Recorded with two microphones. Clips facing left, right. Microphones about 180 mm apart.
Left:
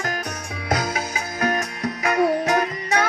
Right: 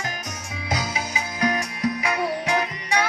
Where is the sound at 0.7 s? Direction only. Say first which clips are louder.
Left 4 dB; 55° left (ahead or behind).